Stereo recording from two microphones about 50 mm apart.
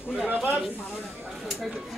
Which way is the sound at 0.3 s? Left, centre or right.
Right.